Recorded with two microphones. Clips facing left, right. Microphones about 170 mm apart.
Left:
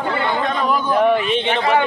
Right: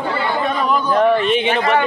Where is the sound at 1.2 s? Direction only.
5° right (ahead or behind).